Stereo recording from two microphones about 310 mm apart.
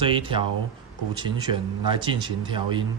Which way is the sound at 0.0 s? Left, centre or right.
Centre.